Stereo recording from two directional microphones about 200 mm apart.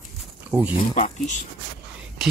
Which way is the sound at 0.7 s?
35° left (ahead or behind).